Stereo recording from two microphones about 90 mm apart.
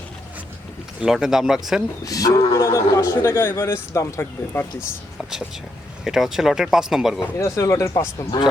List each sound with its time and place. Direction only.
1.0 s speech: 5° right (ahead or behind)
2.0 s a man's voice: 40° left (ahead or behind)
6.1 s speech: 5° right (ahead or behind)
7.3 s a man's voice: 35° left (ahead or behind)